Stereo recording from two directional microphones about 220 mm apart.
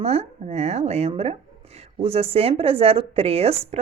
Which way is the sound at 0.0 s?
30° right (ahead or behind).